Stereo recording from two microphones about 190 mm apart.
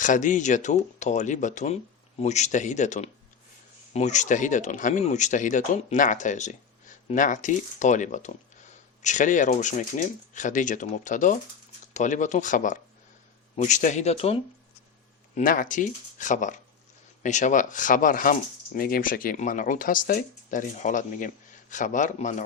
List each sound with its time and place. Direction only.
0.0 s speech: 40° left (ahead or behind)
15.4 s speech: 45° left (ahead or behind)